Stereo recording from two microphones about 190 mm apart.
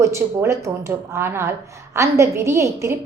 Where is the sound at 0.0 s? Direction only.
15° right (ahead or behind).